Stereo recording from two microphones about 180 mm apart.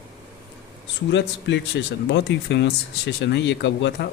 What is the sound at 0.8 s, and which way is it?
Speech, 80° left.